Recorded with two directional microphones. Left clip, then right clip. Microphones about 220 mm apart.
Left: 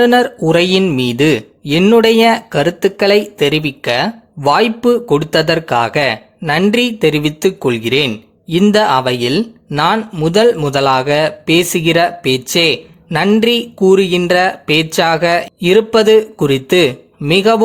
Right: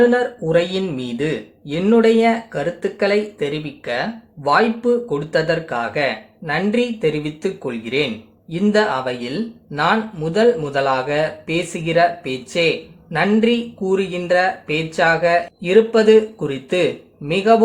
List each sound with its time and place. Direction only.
0.0 s speech: 45° left (ahead or behind)